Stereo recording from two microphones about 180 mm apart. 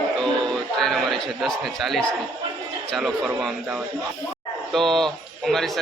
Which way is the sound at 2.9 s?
Centre (ahead or behind).